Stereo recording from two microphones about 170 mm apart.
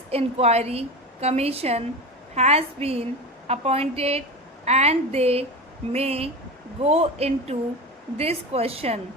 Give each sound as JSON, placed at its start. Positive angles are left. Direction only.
{"t": 0.1, "sound": "a woman's voice", "side_deg": -35}